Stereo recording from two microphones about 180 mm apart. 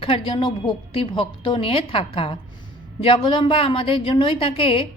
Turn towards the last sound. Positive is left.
turn(degrees=30)  # may be behind; listen again after turning